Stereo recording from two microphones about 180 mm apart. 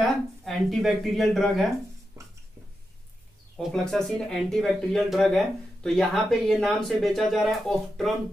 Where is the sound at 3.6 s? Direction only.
5° left (ahead or behind).